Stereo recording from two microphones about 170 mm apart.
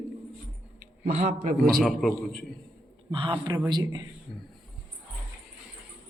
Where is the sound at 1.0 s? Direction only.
40° right (ahead or behind).